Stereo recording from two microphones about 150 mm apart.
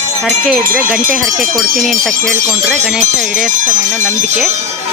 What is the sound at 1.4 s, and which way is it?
Speech, 65° right (ahead or behind).